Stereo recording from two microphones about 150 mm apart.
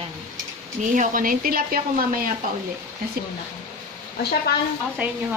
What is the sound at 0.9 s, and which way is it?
Speech, 60° right (ahead or behind).